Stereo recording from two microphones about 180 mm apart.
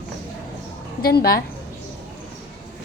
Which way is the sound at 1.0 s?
60° left (ahead or behind).